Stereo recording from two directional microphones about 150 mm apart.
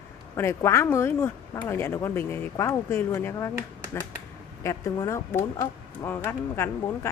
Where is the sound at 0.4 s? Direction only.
15° left (ahead or behind).